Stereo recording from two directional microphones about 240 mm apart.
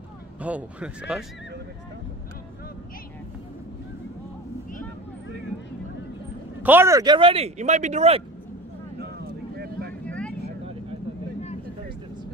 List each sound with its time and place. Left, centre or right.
0.4 s speech: centre
6.6 s speech: centre; by 8.2 s right
9.0 s vehicle: right
10.0 s vehicle: centre